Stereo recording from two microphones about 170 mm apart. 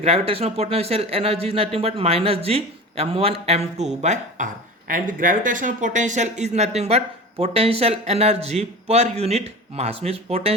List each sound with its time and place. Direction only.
0.0 s speech: 35° right (ahead or behind)
4.9 s speech: 55° right (ahead or behind); by 10.5 s 35° right (ahead or behind)